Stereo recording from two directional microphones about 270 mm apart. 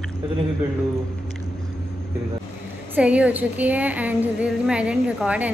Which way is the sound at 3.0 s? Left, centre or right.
Centre.